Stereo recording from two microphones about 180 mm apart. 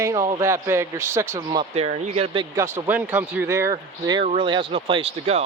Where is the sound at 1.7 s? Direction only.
35° right (ahead or behind).